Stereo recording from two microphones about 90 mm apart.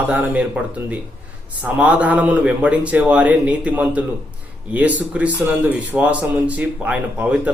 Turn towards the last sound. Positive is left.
turn(degrees=-15)  # may be behind; listen again after turning